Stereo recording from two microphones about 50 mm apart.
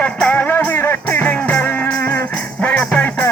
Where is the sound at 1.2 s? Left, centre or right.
Left.